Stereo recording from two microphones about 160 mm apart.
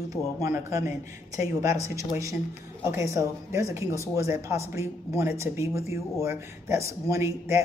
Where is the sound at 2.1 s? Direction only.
20° right (ahead or behind).